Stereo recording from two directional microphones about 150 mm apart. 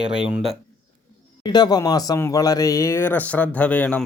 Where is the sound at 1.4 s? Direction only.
30° left (ahead or behind).